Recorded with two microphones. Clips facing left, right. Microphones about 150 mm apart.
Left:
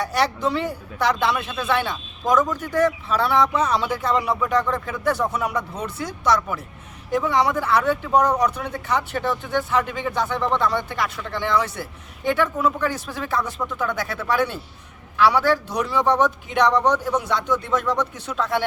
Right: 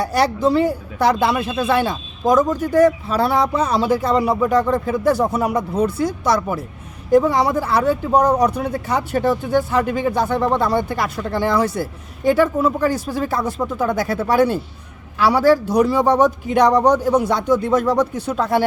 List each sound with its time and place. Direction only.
0.0 s a man's voice: 35° right (ahead or behind)